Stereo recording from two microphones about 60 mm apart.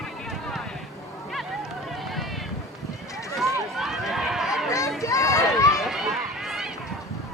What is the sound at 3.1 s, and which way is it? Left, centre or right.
Run, left.